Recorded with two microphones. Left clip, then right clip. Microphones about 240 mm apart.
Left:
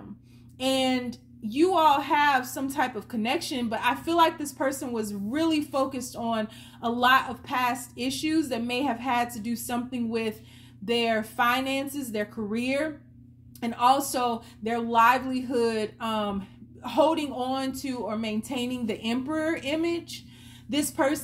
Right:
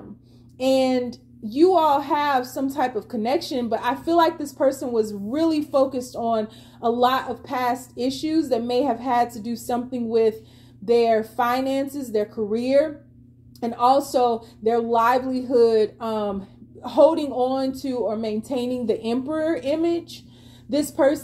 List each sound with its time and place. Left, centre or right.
0.6 s a woman's voice: left